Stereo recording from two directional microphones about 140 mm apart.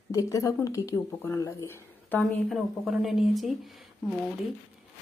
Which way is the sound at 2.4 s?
Centre (ahead or behind).